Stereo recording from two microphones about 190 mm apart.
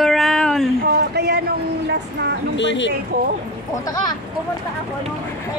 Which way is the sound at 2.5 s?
70° left (ahead or behind).